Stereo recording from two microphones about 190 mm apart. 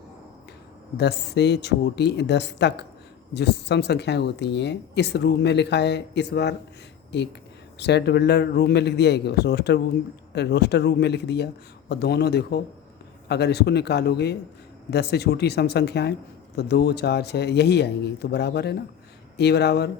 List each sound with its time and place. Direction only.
0.9 s speech: 60° left (ahead or behind)